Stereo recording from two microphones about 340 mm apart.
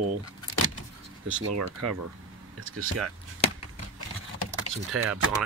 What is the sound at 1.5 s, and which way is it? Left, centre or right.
Speech, right.